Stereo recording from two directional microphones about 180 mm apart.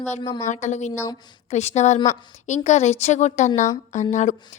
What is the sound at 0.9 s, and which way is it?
Speech, 20° left (ahead or behind).